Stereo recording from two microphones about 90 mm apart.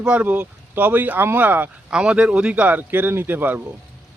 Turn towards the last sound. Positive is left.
turn(degrees=-20)  # may be behind; listen again after turning